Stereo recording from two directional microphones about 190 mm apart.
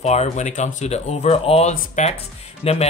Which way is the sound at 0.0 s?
35° left (ahead or behind).